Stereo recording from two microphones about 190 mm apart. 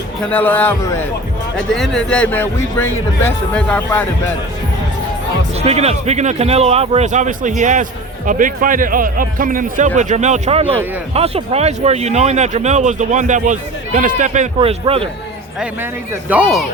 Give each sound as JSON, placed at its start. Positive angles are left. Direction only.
{"t": 0.2, "sound": "a man's voice", "side_deg": 10}
{"t": 1.5, "sound": "a man's voice", "side_deg": 0}
{"t": 5.5, "sound": "speech", "side_deg": -35}
{"t": 16.3, "sound": "speech", "side_deg": -5}